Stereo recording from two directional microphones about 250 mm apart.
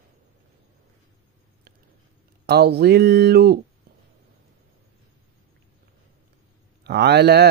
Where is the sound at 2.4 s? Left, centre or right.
Right.